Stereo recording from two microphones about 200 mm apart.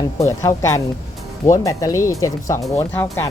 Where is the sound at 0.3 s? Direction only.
15° left (ahead or behind).